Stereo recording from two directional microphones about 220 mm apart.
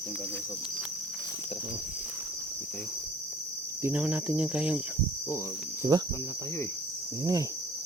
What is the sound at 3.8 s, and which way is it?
Cricket, 5° right (ahead or behind).